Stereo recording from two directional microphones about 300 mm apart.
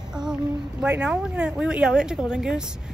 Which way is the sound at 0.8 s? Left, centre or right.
Centre.